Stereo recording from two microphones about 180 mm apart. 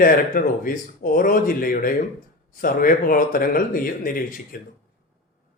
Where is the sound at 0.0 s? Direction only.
55° left (ahead or behind).